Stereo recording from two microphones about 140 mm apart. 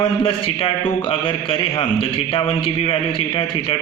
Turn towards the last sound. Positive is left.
turn(degrees=40)  # may be behind; listen again after turning